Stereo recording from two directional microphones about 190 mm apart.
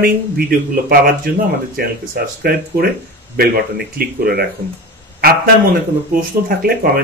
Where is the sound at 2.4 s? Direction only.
55° right (ahead or behind).